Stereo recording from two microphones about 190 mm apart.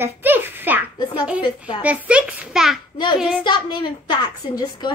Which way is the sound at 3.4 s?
25° left (ahead or behind).